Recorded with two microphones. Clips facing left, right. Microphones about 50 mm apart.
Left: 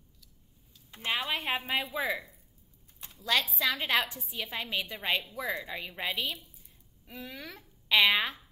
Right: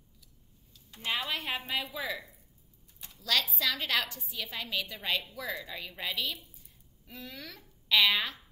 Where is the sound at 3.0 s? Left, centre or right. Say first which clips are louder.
Left 2 dB; left.